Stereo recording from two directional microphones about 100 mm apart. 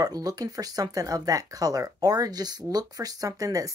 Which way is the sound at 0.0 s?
40° right (ahead or behind).